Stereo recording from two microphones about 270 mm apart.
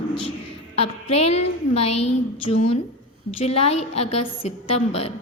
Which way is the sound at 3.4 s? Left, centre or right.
Left.